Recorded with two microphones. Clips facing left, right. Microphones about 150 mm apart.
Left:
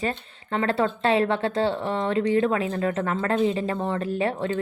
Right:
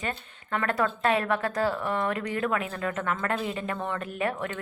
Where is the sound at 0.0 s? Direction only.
30° left (ahead or behind).